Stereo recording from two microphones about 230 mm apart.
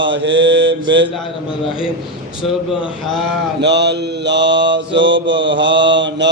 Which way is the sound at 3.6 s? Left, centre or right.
Right.